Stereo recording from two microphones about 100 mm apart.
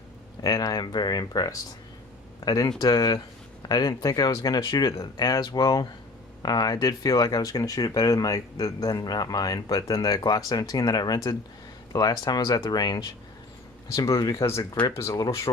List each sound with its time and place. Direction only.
0.4 s speech: 40° left (ahead or behind)
13.9 s speech: 35° left (ahead or behind)
14.4 s speech: 30° left (ahead or behind)